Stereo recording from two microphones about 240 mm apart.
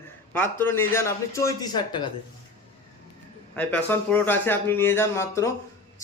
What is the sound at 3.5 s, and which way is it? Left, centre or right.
Speech, centre.